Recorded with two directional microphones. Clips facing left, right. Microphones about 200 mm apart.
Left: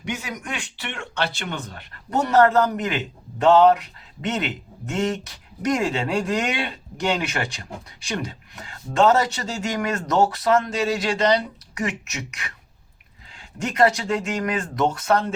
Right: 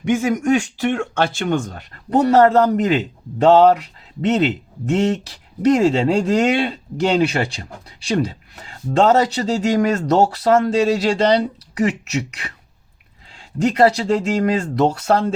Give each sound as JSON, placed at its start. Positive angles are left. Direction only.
{"t": 0.0, "sound": "speech", "side_deg": -50}
{"t": 13.6, "sound": "speech", "side_deg": -30}